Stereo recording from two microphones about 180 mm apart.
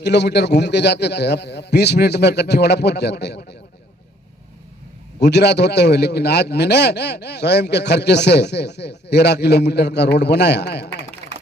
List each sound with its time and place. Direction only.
0.0 s a man's voice: 70° left (ahead or behind)
5.2 s a man's voice: 70° left (ahead or behind)